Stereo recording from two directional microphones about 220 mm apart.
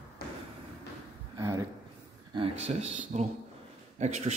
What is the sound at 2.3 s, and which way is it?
Speech, 25° right (ahead or behind).